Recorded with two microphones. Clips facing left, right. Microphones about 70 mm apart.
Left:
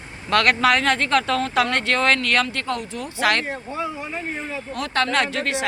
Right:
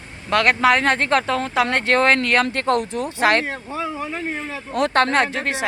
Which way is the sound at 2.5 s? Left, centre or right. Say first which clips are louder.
Right 7 dB; right.